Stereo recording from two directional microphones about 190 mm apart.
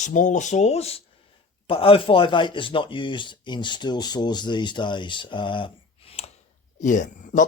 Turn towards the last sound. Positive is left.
turn(degrees=40)  # may be behind; listen again after turning